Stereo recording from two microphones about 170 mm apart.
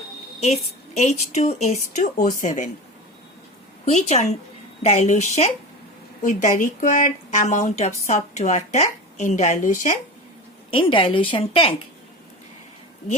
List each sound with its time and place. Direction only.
0.3 s a woman's voice: 40° left (ahead or behind)
3.9 s a woman's voice: 40° left (ahead or behind)
10.7 s a woman's voice: 30° left (ahead or behind)